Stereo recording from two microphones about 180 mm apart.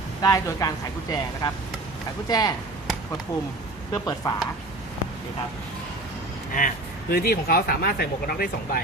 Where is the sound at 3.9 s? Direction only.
25° left (ahead or behind).